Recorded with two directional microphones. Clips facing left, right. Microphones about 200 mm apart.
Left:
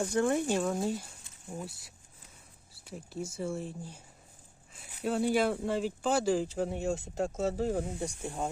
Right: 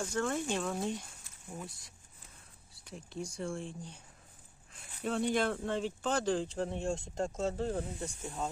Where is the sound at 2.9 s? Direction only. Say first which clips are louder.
Left 3 dB; 5° left (ahead or behind).